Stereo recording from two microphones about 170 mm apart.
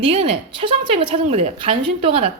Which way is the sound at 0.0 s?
35° right (ahead or behind).